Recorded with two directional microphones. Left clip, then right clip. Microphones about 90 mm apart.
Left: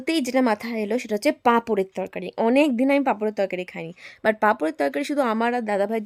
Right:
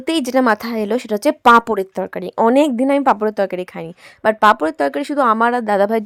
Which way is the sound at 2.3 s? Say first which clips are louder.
Right 6 dB; 20° right (ahead or behind).